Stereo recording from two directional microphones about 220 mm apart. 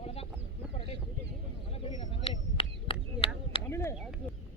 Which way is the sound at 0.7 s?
25° left (ahead or behind).